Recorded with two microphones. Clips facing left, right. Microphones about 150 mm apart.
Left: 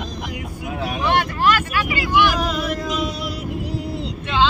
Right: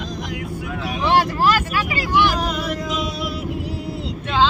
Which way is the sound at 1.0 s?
35° right (ahead or behind).